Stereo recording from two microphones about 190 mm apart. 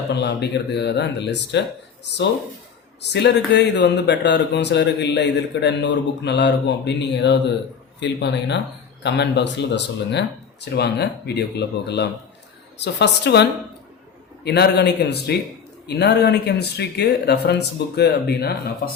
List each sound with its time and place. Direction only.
0.1 s speech: 65° left (ahead or behind)
3.0 s speech: 65° left (ahead or behind)